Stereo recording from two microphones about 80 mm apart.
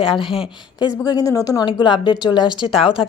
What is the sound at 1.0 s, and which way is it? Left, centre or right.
Speech, left.